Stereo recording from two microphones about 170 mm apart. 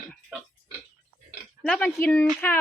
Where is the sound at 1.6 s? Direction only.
5° left (ahead or behind).